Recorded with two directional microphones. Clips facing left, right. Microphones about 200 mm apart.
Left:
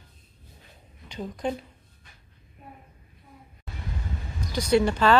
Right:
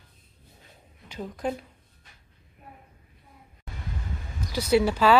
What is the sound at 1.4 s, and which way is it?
Speech, centre (ahead or behind).